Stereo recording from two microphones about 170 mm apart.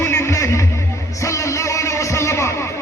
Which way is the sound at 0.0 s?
15° left (ahead or behind).